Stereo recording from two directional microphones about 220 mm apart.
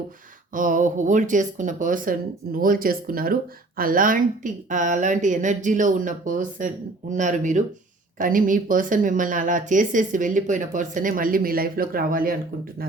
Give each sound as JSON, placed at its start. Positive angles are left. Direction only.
{"t": 0.5, "sound": "speech", "side_deg": -35}